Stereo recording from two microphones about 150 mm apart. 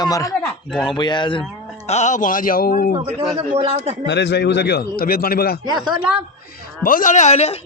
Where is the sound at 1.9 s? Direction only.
50° left (ahead or behind); by 2.9 s 80° left.